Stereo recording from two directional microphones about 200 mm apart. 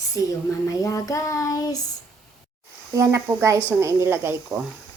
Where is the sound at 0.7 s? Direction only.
15° left (ahead or behind).